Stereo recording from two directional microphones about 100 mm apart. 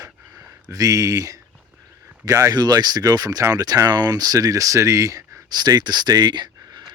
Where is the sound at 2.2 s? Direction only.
35° right (ahead or behind).